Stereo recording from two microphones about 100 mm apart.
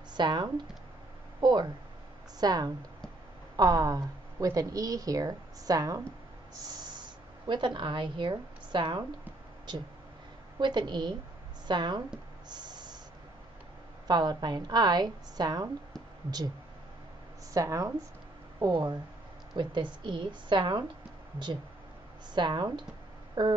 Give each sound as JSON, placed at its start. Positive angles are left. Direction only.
{"t": 0.1, "sound": "a woman's voice", "side_deg": -45}
{"t": 10.6, "sound": "a woman's voice", "side_deg": -50}
{"t": 12.4, "sound": "snort", "side_deg": -45}
{"t": 14.0, "sound": "a woman's voice", "side_deg": -45}
{"t": 17.6, "sound": "a woman's voice", "side_deg": -35}
{"t": 22.3, "sound": "a woman's voice", "side_deg": -45}